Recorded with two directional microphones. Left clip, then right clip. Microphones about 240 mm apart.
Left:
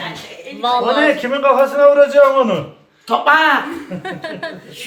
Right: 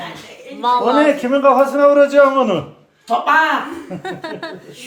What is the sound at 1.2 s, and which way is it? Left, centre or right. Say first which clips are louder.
A man's voice: right 1 dB; right.